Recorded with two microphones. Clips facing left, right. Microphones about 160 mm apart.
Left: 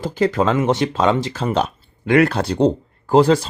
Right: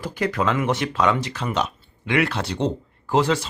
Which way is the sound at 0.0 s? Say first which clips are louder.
Left 6 dB; 25° left (ahead or behind).